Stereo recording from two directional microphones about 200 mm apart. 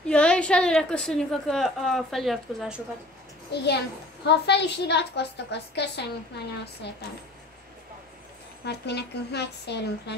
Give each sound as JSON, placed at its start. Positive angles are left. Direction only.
{"t": 0.1, "sound": "a woman's voice", "side_deg": 5}
{"t": 3.5, "sound": "a woman's voice", "side_deg": 55}
{"t": 8.6, "sound": "a woman's voice", "side_deg": 55}